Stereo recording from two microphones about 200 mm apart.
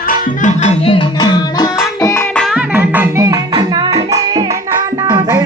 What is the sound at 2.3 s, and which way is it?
Music, centre (ahead or behind).